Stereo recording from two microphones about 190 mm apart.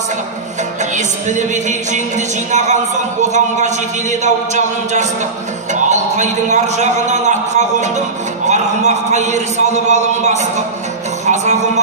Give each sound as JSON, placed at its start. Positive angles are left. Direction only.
{"t": 0.9, "sound": "music", "side_deg": -40}
{"t": 5.7, "sound": "a man's voice", "side_deg": -40}
{"t": 8.5, "sound": "music", "side_deg": -40}
{"t": 11.2, "sound": "speech", "side_deg": -40}